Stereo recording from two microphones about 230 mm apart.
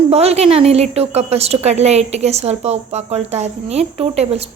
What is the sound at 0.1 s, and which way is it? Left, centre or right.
Speech, right.